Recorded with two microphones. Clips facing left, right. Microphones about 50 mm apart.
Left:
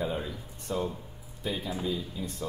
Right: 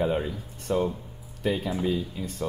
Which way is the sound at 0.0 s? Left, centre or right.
Right.